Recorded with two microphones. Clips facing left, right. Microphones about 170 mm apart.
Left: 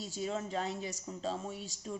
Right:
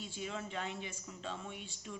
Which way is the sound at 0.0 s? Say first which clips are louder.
Left 5 dB; 40° left (ahead or behind).